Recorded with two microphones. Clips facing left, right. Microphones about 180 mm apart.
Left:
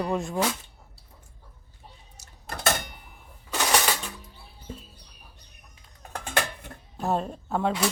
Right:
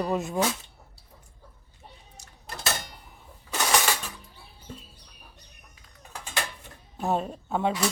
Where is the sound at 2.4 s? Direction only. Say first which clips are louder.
Left 5 dB; 55° left (ahead or behind).